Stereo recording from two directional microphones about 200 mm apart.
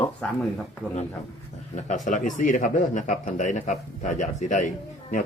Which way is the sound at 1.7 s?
35° left (ahead or behind).